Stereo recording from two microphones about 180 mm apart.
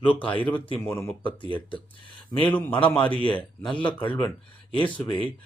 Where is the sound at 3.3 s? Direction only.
5° left (ahead or behind).